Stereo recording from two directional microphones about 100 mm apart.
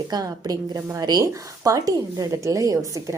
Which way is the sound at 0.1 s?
40° right (ahead or behind).